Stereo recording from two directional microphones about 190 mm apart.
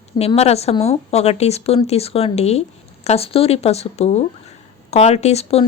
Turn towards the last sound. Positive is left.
turn(degrees=30)  # may be behind; listen again after turning